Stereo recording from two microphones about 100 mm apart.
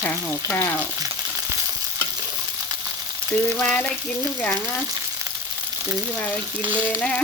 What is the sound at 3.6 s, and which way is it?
Frying, 10° left (ahead or behind).